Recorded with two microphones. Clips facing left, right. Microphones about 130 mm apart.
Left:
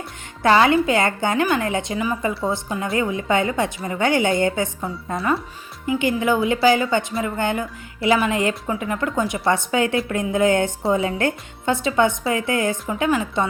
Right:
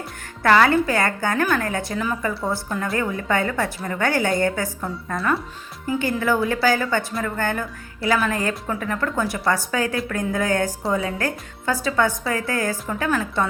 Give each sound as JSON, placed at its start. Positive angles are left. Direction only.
{"t": 0.4, "sound": "a woman's voice", "side_deg": 20}
{"t": 7.1, "sound": "speech", "side_deg": 0}
{"t": 7.3, "sound": "a woman's voice", "side_deg": 20}